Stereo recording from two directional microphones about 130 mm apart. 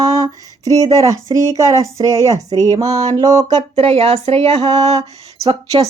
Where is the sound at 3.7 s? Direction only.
50° right (ahead or behind).